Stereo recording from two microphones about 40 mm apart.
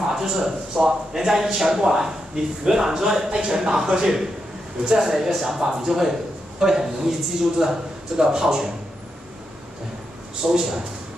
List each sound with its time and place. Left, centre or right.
0.0 s speech: centre
10.4 s speech: centre